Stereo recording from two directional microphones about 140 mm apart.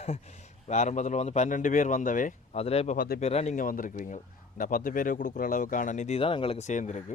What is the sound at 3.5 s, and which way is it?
Speech, 80° left.